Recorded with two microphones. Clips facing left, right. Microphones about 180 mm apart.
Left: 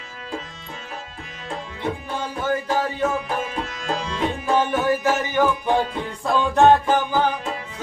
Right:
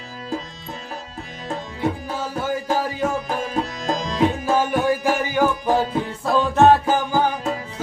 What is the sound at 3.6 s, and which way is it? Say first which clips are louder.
Music: right 3 dB; 40° right (ahead or behind).